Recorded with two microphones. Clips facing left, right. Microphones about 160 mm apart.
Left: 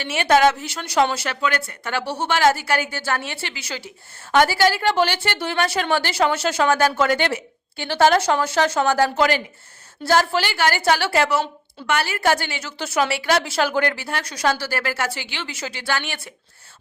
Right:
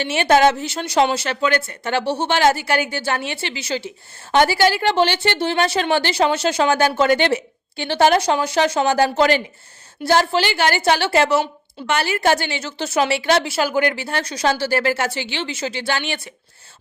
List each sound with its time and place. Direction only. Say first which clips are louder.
0.0 s a woman's voice: right 2 dB; 25° right (ahead or behind)
13.5 s a woman's voice: right 2 dB; 5° right (ahead or behind)